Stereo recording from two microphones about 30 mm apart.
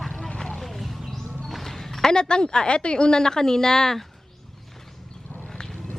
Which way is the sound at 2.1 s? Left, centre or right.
Left.